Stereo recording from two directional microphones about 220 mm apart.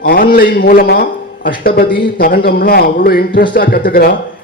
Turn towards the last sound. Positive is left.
turn(degrees=40)  # may be behind; listen again after turning